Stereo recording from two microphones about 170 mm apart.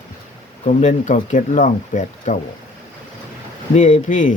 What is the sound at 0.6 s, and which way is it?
Speech, 45° left (ahead or behind).